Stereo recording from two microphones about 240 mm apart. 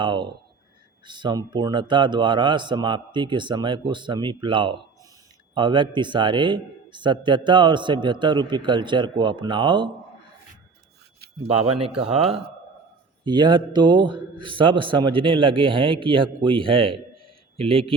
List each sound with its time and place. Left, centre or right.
0.0 s a man's voice: centre
12.0 s a man's voice: right